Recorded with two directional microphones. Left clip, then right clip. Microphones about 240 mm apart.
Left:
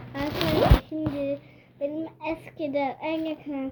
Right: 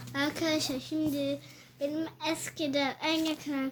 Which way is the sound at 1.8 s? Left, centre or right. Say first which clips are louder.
Left 2 dB; centre.